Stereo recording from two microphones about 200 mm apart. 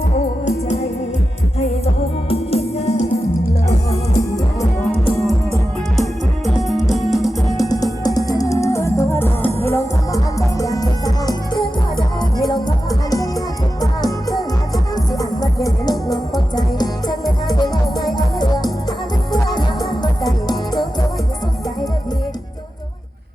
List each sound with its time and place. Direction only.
0.4 s music: 35° left (ahead or behind)
2.3 s music: 30° left (ahead or behind)
6.0 s music: centre (ahead or behind)
7.6 s music: 20° left (ahead or behind)